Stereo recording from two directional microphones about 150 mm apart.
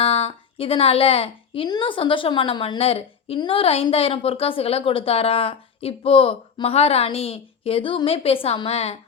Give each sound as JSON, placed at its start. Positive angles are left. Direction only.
{"t": 0.0, "sound": "a woman's voice", "side_deg": 40}